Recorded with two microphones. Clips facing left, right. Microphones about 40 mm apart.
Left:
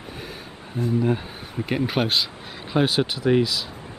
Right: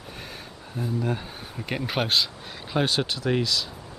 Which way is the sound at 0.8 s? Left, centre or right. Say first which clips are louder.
Left 5 dB; centre.